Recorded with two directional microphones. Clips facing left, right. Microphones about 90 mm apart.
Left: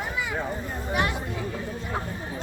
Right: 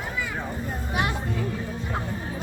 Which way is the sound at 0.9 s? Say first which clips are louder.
Left 1 dB; 20° right (ahead or behind).